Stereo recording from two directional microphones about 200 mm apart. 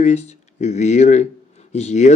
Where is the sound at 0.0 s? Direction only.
35° left (ahead or behind).